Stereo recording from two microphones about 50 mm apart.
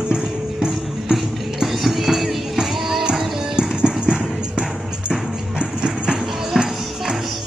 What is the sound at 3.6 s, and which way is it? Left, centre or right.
Music, centre.